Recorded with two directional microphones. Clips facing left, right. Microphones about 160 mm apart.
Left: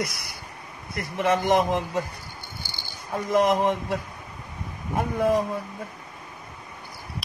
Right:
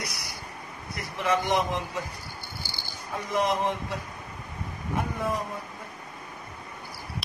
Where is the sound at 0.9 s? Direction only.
50° left (ahead or behind).